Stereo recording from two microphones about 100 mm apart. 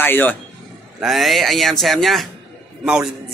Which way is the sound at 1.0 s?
Centre (ahead or behind).